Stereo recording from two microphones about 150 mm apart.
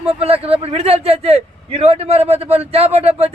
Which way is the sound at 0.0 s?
40° right (ahead or behind).